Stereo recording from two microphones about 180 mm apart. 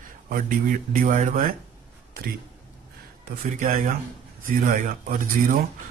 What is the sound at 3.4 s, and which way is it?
Speech, 45° right (ahead or behind).